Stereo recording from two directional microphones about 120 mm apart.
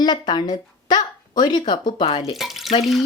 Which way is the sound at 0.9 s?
35° left (ahead or behind).